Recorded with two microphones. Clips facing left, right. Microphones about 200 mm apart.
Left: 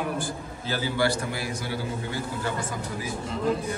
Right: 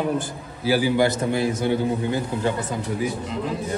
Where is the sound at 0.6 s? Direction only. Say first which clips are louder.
Right 7 dB; 15° right (ahead or behind).